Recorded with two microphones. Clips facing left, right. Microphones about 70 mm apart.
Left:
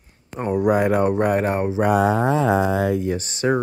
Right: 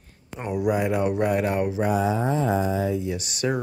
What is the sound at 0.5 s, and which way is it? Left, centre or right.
Speech, left.